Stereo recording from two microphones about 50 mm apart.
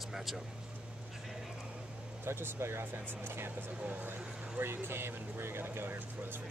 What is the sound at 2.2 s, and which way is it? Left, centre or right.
Speech, right.